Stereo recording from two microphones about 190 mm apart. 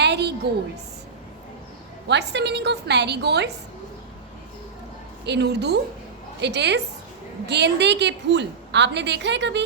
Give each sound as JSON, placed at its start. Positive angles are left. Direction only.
{"t": 0.0, "sound": "a sound", "side_deg": -60}
{"t": 2.0, "sound": "a woman's voice", "side_deg": -65}
{"t": 5.2, "sound": "a woman's voice", "side_deg": -60}